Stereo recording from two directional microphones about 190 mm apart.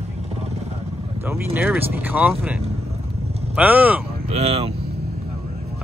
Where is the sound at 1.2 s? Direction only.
10° right (ahead or behind).